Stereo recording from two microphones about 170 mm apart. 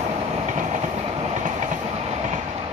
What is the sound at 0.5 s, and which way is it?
Train, 45° right (ahead or behind).